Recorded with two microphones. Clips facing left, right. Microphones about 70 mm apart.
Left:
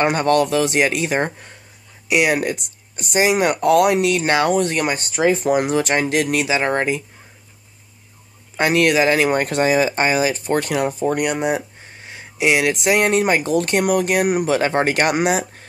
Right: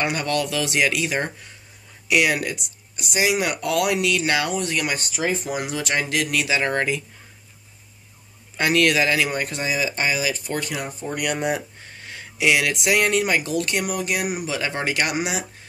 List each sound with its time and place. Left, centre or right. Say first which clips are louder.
0.0 s speech: left 7 dB; left
2.0 s speech: left 3 dB; left
2.5 s speech: left 4 dB; left
5.2 s speech: left 10 dB; left
8.5 s speech: left 3 dB; left
10.6 s speech: left 9 dB; left
11.2 s speech: left 4 dB; centre; by 15.4 s left